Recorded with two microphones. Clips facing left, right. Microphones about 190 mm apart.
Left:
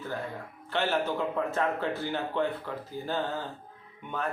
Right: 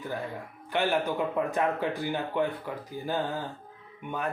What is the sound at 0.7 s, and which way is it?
A man's voice, 15° right (ahead or behind).